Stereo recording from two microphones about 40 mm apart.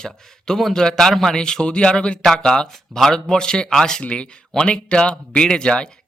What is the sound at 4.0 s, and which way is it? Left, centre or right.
Speech, left.